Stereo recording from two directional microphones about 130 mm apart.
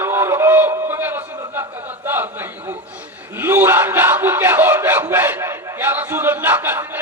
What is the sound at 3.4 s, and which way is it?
Speech, 15° right (ahead or behind).